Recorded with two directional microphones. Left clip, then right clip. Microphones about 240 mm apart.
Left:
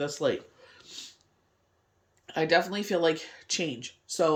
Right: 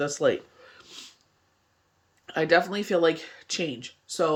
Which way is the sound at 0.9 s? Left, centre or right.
Centre.